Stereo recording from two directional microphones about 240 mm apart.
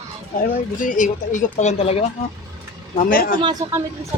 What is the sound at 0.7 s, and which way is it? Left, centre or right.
Speech, left.